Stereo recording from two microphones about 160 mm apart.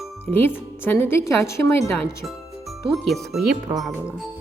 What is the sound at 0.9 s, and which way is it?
Speech, 15° left (ahead or behind).